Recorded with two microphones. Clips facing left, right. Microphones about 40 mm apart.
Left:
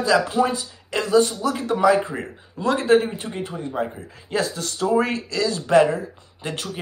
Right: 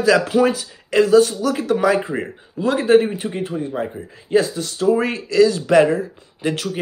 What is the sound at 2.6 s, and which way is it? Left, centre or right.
Speech, centre.